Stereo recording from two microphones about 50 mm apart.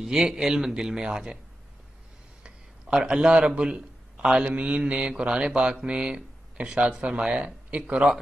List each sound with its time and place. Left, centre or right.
0.0 s speech: centre
2.4 s a sound: centre
3.6 s a man's voice: centre
4.5 s speech: right